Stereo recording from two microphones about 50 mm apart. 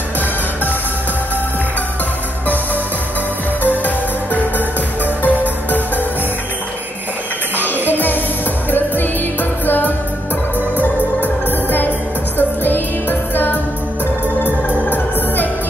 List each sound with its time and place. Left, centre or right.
3.8 s music: left
7.5 s music: right
8.6 s music: left